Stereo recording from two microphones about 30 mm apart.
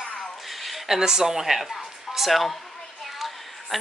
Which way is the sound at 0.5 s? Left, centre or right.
Centre.